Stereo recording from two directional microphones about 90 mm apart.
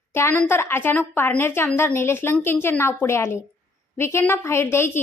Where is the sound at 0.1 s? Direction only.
25° left (ahead or behind).